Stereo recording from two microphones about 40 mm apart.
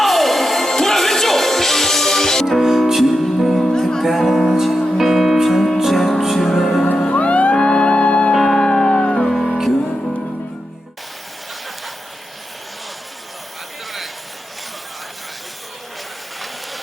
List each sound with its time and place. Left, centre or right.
0.0 s music: centre
2.6 s music: centre
3.7 s music: centre
4.0 s music: centre
7.1 s music: left
7.5 s music: left
8.3 s music: centre
9.2 s music: centre